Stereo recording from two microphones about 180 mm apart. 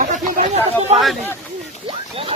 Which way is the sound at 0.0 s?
45° right (ahead or behind).